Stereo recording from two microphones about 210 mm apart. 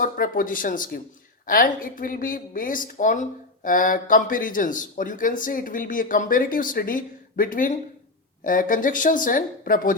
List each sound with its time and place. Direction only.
0.0 s speech: 40° left (ahead or behind)